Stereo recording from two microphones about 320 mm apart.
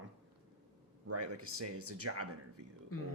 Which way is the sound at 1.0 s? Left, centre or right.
Right.